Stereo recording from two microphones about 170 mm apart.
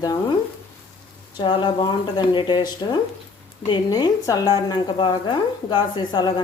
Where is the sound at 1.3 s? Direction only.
30° left (ahead or behind).